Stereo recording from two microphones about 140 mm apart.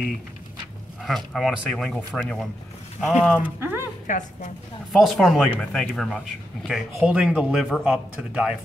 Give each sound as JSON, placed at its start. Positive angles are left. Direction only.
{"t": 1.0, "sound": "speech", "side_deg": 0}
{"t": 3.0, "sound": "speech", "side_deg": 0}
{"t": 3.4, "sound": "speech", "side_deg": -15}
{"t": 4.1, "sound": "a woman's voice", "side_deg": 60}
{"t": 4.9, "sound": "speech", "side_deg": 0}